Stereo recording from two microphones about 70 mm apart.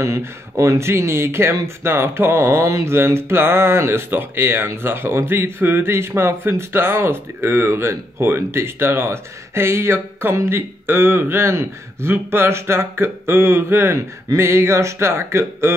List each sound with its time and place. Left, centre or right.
0.0 s speech: right